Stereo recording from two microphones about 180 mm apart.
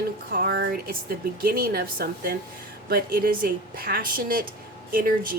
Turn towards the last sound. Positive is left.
turn(degrees=-50)  # may be behind; listen again after turning